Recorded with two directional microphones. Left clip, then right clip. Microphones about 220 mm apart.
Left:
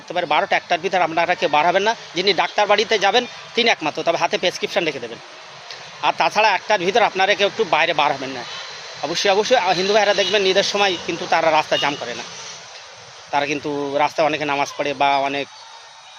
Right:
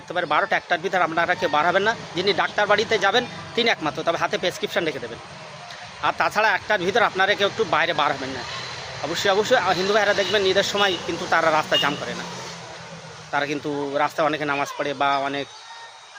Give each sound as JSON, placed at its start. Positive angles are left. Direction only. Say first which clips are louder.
{"t": 0.1, "sound": "speech", "louder": "left 3 dB", "side_deg": 5}
{"t": 6.0, "sound": "speech", "louder": "left 4 dB", "side_deg": 5}
{"t": 9.1, "sound": "speech", "louder": "left 3 dB", "side_deg": 5}
{"t": 13.3, "sound": "speech", "louder": "left 4 dB", "side_deg": 10}